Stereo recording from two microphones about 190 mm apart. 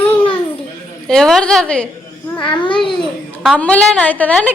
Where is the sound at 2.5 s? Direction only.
25° left (ahead or behind).